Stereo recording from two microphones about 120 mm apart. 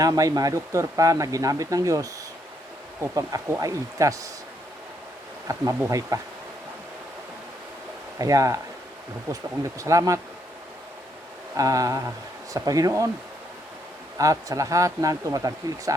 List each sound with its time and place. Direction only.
0.0 s speech: 30° right (ahead or behind)
5.5 s speech: 25° right (ahead or behind)
8.2 s speech: 30° right (ahead or behind)
11.5 s speech: 30° right (ahead or behind)
14.2 s speech: 30° right (ahead or behind)